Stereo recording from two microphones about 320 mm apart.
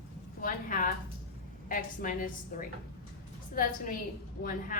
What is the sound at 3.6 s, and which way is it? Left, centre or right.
Speech, left.